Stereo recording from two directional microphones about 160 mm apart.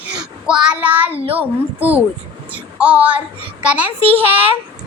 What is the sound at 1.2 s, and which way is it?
Speech, 35° right (ahead or behind).